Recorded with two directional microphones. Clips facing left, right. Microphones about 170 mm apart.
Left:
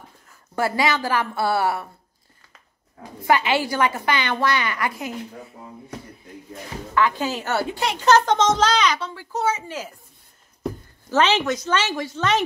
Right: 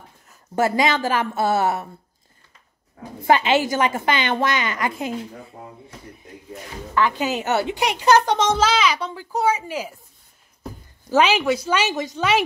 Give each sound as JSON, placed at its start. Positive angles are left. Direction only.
{"t": 0.3, "sound": "a woman's voice", "side_deg": -20}
{"t": 3.2, "sound": "a woman's voice", "side_deg": -25}
{"t": 7.0, "sound": "a woman's voice", "side_deg": -15}
{"t": 11.1, "sound": "a woman's voice", "side_deg": -10}